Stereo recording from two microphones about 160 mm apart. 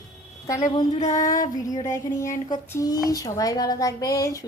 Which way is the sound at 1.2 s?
55° left (ahead or behind).